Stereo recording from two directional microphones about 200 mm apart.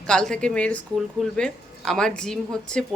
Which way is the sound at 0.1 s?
5° left (ahead or behind).